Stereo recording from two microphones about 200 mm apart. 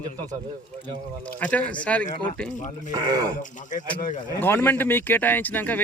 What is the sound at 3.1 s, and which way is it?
Speech, 20° right (ahead or behind).